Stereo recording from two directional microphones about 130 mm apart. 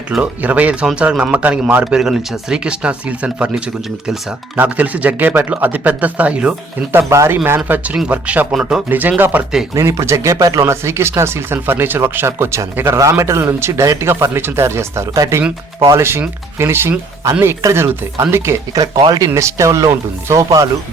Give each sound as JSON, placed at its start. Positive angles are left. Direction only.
{"t": 0.1, "sound": "speech", "side_deg": -10}
{"t": 7.1, "sound": "speech", "side_deg": -20}